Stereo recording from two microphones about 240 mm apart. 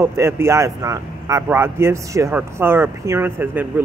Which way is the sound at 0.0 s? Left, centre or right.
Centre.